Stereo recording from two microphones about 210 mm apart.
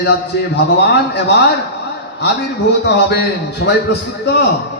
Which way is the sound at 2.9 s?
50° left (ahead or behind).